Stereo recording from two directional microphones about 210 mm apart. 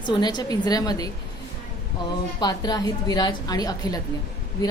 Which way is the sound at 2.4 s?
20° left (ahead or behind).